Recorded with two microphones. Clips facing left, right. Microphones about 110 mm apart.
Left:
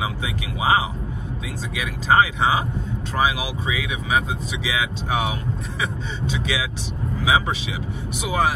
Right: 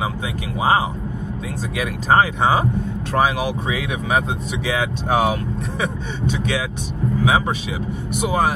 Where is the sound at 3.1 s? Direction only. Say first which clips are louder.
Right 4 dB; 55° right (ahead or behind).